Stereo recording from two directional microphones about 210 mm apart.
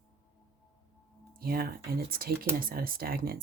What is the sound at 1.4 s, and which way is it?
Speech, 45° right (ahead or behind).